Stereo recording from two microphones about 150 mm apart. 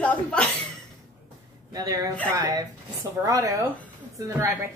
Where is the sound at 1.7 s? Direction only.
25° right (ahead or behind).